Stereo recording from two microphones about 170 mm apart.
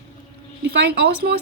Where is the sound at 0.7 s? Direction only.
70° right (ahead or behind).